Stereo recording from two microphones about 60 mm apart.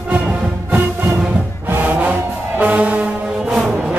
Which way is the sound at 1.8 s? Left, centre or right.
Right.